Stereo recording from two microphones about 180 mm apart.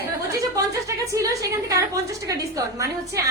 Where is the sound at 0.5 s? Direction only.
20° right (ahead or behind).